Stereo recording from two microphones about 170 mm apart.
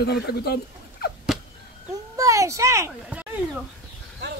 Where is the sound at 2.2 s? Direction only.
20° right (ahead or behind).